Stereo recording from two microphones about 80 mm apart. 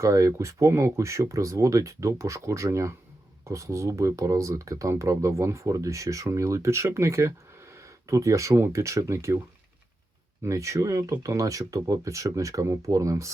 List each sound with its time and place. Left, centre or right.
0.0 s speech: right
10.4 s speech: right